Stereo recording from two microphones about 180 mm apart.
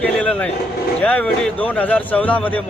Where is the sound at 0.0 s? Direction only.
5° left (ahead or behind).